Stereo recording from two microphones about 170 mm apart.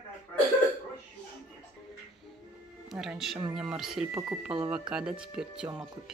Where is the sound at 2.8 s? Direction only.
Centre (ahead or behind).